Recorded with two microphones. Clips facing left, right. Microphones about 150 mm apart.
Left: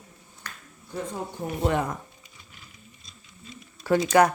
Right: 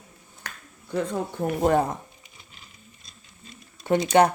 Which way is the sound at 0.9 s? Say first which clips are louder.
Right 6 dB; 70° right (ahead or behind).